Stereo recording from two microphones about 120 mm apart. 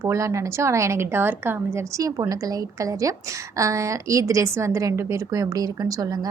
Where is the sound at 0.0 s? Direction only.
25° right (ahead or behind).